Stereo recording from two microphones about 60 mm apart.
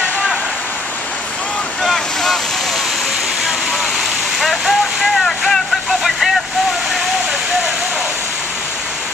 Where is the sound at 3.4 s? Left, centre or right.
Centre.